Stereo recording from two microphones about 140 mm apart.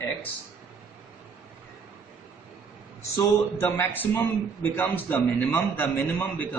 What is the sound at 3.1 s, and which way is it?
A man's voice, 15° left (ahead or behind).